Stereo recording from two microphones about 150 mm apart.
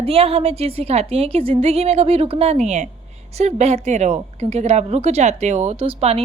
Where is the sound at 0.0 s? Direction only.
40° right (ahead or behind).